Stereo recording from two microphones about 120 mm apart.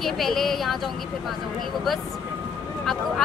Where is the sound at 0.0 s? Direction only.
Centre (ahead or behind).